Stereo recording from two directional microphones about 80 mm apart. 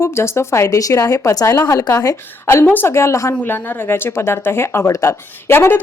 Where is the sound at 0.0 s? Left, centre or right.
Left.